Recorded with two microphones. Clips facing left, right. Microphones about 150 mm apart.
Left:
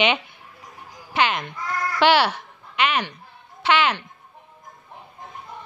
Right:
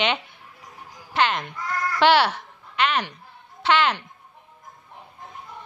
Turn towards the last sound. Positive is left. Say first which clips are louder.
# even
turn(degrees=5)  # may be behind; listen again after turning